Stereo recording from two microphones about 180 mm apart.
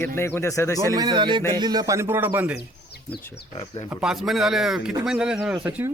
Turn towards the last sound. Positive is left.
turn(degrees=-10)  # may be behind; listen again after turning